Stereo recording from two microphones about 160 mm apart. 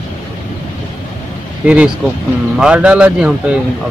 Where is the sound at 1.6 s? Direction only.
5° right (ahead or behind).